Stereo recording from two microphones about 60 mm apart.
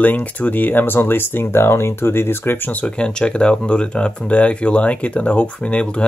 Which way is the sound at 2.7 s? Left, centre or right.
Centre.